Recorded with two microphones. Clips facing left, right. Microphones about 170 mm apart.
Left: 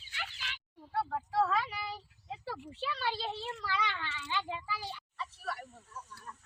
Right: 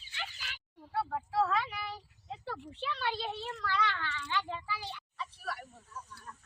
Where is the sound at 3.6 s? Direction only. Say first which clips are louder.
Right 3 dB; 10° left (ahead or behind).